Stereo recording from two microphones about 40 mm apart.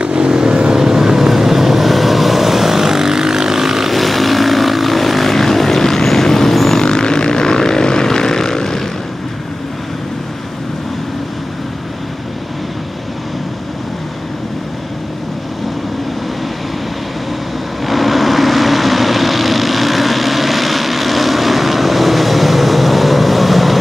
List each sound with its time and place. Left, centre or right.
0.0 s vehicle: right; by 6.8 s centre
6.8 s vehicle: centre
17.8 s vehicle: centre